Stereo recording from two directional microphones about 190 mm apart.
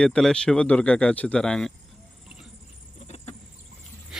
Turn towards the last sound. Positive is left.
turn(degrees=35)  # may be behind; listen again after turning